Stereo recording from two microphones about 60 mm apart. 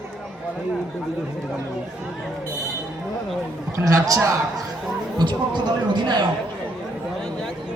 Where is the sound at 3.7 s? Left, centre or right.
Right.